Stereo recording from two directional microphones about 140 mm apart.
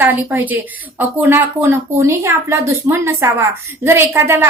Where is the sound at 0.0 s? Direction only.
15° right (ahead or behind).